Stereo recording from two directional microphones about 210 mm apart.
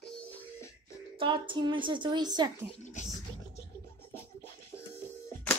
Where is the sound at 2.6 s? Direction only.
35° left (ahead or behind).